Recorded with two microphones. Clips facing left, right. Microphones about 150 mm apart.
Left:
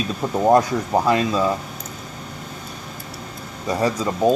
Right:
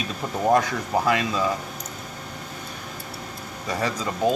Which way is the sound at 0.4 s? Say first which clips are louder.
Left 4 dB; 25° left (ahead or behind).